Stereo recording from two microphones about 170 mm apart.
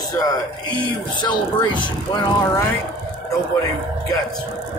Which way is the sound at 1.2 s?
25° left (ahead or behind).